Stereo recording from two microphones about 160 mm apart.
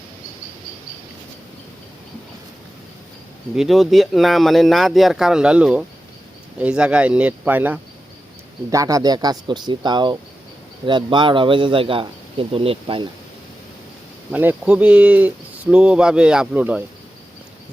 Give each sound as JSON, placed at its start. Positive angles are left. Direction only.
{"t": 3.5, "sound": "speech", "side_deg": 0}
{"t": 8.7, "sound": "speech", "side_deg": -20}
{"t": 14.3, "sound": "speech", "side_deg": -10}